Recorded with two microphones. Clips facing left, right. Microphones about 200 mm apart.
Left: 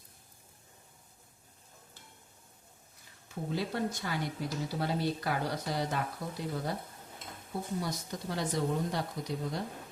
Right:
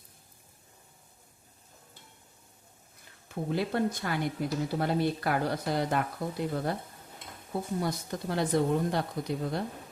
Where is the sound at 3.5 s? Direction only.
60° right (ahead or behind).